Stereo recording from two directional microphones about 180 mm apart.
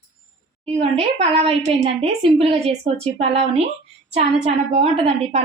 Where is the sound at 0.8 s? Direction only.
35° right (ahead or behind).